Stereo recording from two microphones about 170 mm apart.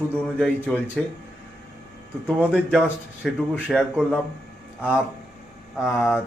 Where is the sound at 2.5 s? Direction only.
5° left (ahead or behind).